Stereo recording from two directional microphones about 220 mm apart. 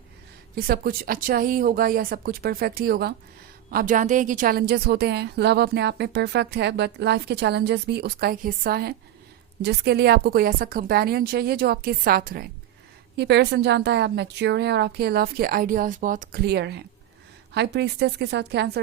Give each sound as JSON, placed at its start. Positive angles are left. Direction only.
{"t": 0.5, "sound": "a woman's voice", "side_deg": -45}